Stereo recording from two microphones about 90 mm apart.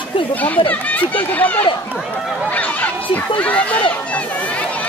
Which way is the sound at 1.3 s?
20° left (ahead or behind).